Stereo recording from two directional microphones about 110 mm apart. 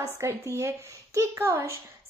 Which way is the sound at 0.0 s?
25° right (ahead or behind).